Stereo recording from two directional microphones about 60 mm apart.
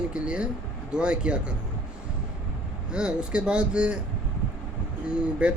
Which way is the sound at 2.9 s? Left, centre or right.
Centre.